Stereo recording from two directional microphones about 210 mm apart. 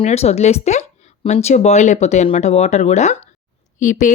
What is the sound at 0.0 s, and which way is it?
Speech, 30° left (ahead or behind).